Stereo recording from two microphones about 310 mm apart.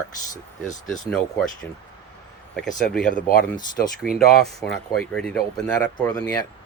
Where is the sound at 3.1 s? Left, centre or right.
Left.